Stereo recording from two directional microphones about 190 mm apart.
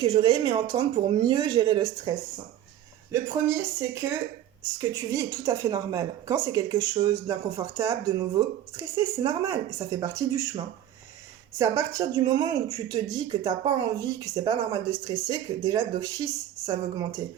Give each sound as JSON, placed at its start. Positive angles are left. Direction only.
{"t": 0.0, "sound": "a woman's voice", "side_deg": -25}
{"t": 3.1, "sound": "speech", "side_deg": -10}
{"t": 11.5, "sound": "a woman's voice", "side_deg": -15}